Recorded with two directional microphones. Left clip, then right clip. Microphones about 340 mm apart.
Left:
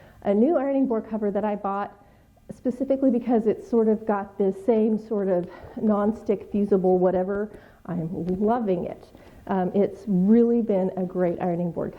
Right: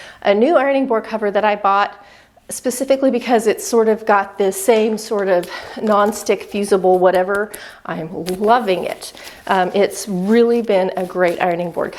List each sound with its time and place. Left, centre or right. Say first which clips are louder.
0.3 s a woman's voice: right 9 dB; centre
6.8 s speech: right 9 dB; centre
7.1 s a woman's voice: right 9 dB; centre